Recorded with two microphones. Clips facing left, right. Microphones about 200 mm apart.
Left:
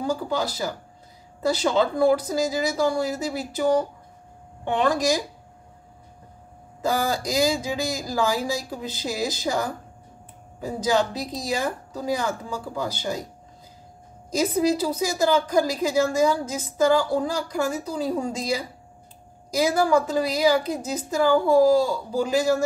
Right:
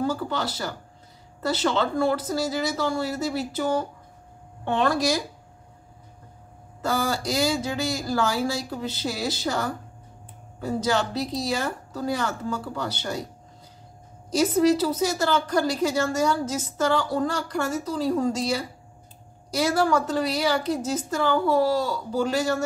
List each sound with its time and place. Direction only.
0.0 s a woman's voice: 15° left (ahead or behind)
6.8 s a woman's voice: 15° left (ahead or behind)
14.5 s a woman's voice: 10° left (ahead or behind)
19.5 s a woman's voice: 10° left (ahead or behind)